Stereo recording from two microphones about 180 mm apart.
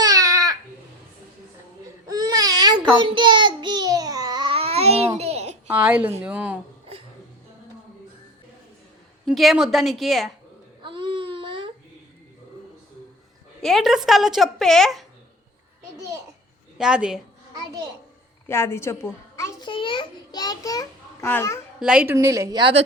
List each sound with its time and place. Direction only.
0.0 s baby cry: 20° right (ahead or behind)
2.0 s baby cry: 20° right (ahead or behind); by 5.5 s 35° right (ahead or behind)
5.6 s a woman's voice: 5° right (ahead or behind)
9.2 s a woman's voice: centre (ahead or behind)
10.8 s baby cry: 30° right (ahead or behind)
13.6 s a woman's voice: centre (ahead or behind)
16.7 s a woman's voice: 5° right (ahead or behind)
17.5 s a sound: 20° right (ahead or behind)
18.4 s a child's voice: 15° left (ahead or behind)
21.8 s a woman's voice: 5° right (ahead or behind)
22.1 s a woman's voice: 15° right (ahead or behind)